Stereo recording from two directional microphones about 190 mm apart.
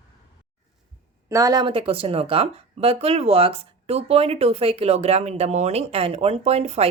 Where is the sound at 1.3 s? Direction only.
20° right (ahead or behind).